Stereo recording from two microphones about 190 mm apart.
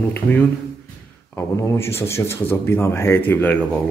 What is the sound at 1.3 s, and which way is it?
Speech, 15° left (ahead or behind).